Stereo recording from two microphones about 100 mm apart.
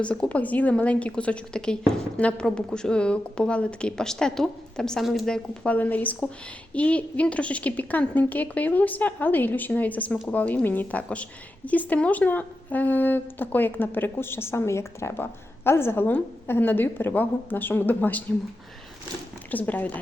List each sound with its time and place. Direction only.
0.0 s a woman's voice: 10° left (ahead or behind)
19.5 s a woman's voice: 15° left (ahead or behind)